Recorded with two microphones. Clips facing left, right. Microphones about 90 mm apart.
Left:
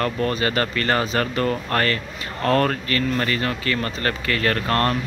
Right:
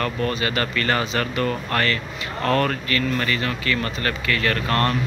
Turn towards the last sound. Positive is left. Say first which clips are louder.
# left 1 dB
turn(degrees=35)  # may be behind; listen again after turning